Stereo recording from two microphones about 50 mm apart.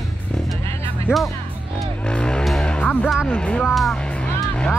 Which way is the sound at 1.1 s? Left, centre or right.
Left.